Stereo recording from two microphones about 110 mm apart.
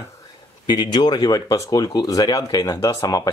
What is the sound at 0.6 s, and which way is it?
Speech, 40° left (ahead or behind).